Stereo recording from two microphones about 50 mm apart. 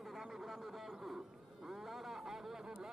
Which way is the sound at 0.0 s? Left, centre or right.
Centre.